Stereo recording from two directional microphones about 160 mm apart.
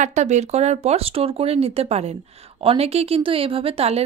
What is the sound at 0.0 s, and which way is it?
Speech, 45° right (ahead or behind).